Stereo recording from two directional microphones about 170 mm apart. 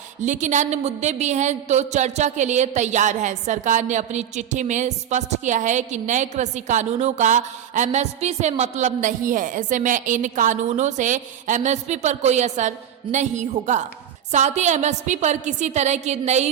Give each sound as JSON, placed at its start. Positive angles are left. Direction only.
{"t": 0.2, "sound": "a woman's voice", "side_deg": -45}